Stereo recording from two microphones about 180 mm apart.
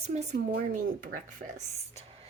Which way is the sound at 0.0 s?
40° right (ahead or behind).